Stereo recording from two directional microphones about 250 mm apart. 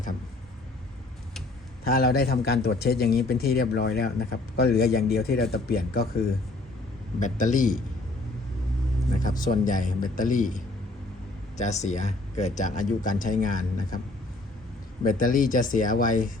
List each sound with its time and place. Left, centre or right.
1.8 s speech: left
7.2 s speech: left
9.2 s speech: left
15.0 s speech: left